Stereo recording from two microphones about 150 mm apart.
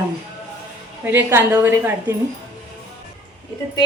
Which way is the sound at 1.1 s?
10° right (ahead or behind).